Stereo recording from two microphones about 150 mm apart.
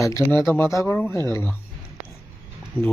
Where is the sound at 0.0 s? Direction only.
20° left (ahead or behind).